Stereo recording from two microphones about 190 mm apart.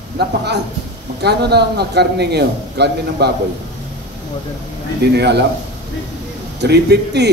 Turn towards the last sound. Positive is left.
turn(degrees=-60)  # may be behind; listen again after turning